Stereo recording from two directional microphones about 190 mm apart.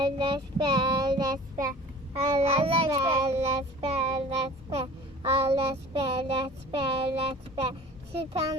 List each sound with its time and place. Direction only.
0.0 s child singing: 25° right (ahead or behind)